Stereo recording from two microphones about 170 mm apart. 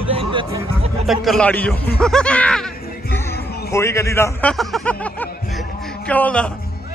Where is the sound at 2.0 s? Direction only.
5° left (ahead or behind).